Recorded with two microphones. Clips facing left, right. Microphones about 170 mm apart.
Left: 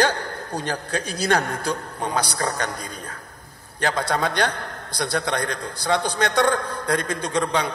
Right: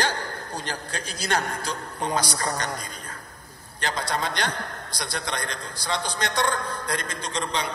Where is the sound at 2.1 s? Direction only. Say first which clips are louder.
Left 3 dB; 55° left (ahead or behind).